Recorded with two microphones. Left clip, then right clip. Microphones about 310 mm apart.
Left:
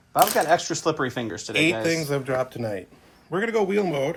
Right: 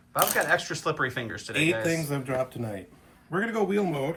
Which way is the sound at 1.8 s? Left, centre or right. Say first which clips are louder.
Left 4 dB; left.